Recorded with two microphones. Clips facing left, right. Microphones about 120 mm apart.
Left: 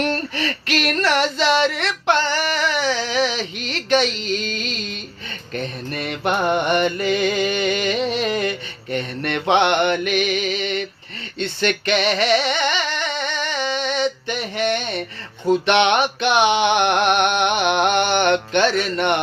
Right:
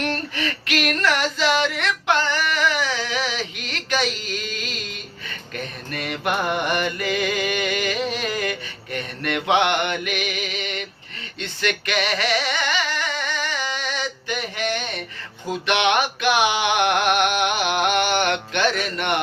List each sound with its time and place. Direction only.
0.3 s female singing: 35° left (ahead or behind)
2.5 s a sound: 30° left (ahead or behind)
5.9 s mantra: 30° left (ahead or behind)
11.3 s singing: 30° left (ahead or behind)
15.6 s music: 30° left (ahead or behind)